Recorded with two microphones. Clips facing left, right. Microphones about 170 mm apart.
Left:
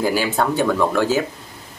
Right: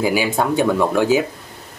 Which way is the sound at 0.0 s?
15° right (ahead or behind).